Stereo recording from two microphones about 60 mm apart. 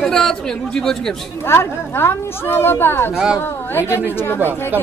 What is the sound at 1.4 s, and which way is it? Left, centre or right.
Speech, left.